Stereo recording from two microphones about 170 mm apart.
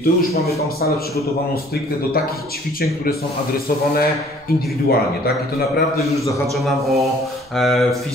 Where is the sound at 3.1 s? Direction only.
60° left (ahead or behind).